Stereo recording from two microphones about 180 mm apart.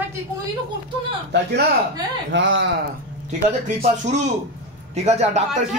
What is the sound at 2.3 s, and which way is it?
Speech, 90° right.